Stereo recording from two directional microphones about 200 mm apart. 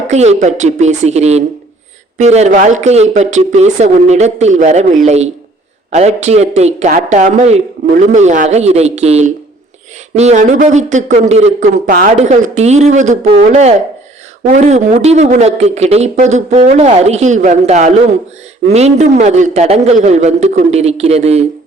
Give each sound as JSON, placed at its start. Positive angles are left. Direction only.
{"t": 0.1, "sound": "speech", "side_deg": -35}